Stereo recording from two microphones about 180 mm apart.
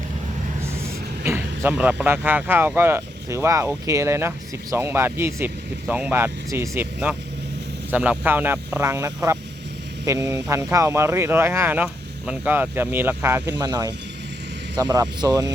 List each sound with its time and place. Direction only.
1.2 s speech: 10° right (ahead or behind)